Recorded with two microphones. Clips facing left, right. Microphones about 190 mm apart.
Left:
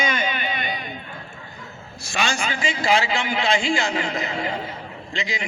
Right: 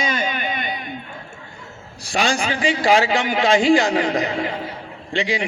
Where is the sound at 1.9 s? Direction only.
35° right (ahead or behind).